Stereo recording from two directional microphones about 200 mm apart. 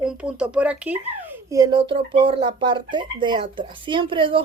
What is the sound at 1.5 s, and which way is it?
Speech, 15° right (ahead or behind).